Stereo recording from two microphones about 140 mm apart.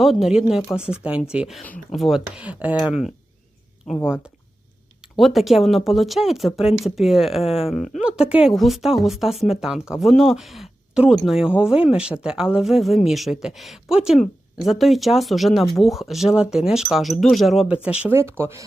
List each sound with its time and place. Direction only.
0.0 s speech: centre (ahead or behind)
1.6 s speech: 10° left (ahead or behind)
2.0 s speech: centre (ahead or behind)
4.0 s speech: 5° right (ahead or behind)